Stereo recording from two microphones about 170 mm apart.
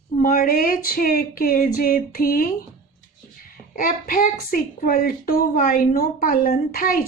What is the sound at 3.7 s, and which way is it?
A woman's voice, 55° left (ahead or behind).